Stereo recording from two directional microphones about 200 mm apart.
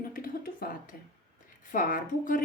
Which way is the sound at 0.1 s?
45° left (ahead or behind).